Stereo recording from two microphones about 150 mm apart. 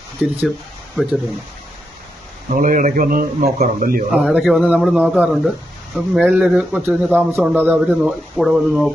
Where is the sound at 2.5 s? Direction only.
60° right (ahead or behind).